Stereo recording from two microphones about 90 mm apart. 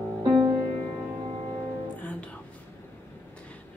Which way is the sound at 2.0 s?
15° left (ahead or behind).